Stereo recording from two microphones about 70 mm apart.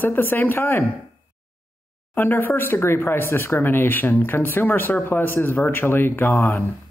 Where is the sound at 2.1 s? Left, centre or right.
Left.